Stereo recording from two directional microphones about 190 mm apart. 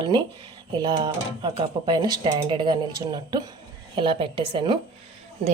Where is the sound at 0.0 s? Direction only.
25° right (ahead or behind).